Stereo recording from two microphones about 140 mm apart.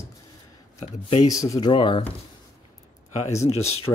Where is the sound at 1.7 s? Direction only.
40° left (ahead or behind).